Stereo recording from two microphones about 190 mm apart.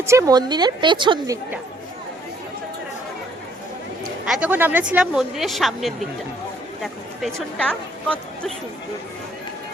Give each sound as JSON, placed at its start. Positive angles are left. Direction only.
{"t": 0.0, "sound": "a woman's voice", "side_deg": -15}
{"t": 4.3, "sound": "speech", "side_deg": -5}